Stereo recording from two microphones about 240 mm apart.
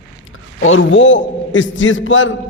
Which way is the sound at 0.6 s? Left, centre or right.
Left.